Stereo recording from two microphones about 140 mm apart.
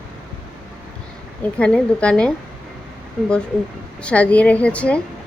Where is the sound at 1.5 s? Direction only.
10° left (ahead or behind).